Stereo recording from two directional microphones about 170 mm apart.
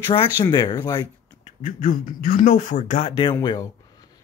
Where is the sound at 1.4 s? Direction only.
50° left (ahead or behind); by 3.3 s 35° left (ahead or behind).